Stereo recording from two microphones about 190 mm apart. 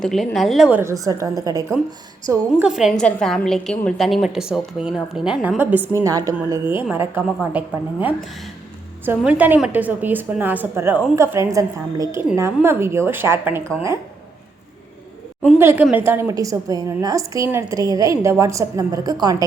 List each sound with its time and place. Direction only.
0.0 s a woman's voice: centre (ahead or behind)
0.8 s a woman's voice: 15° right (ahead or behind)
2.6 s a woman's voice: centre (ahead or behind)
9.0 s a woman's voice: 10° right (ahead or behind)
15.5 s a woman's voice: 10° right (ahead or behind)